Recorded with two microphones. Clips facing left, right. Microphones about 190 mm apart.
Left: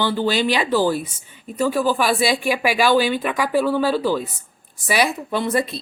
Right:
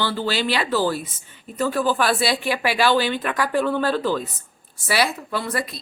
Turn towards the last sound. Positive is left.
turn(degrees=25)  # may be behind; listen again after turning